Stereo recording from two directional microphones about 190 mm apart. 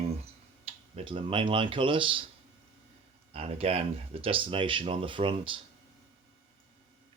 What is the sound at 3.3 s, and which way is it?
Speech, 30° right (ahead or behind).